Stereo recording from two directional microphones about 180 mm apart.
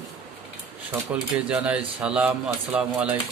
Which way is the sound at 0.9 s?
10° right (ahead or behind).